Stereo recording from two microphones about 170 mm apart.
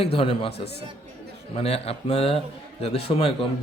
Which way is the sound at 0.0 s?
35° left (ahead or behind).